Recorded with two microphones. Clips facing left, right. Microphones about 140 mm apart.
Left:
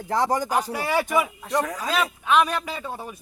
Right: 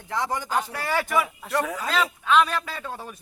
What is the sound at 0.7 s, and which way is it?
A man's voice, 15° left (ahead or behind).